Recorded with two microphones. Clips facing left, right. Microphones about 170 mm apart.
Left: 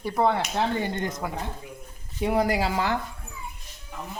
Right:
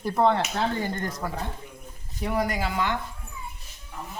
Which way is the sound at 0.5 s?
20° left (ahead or behind).